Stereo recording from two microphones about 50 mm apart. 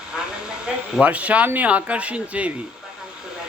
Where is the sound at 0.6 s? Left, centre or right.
Right.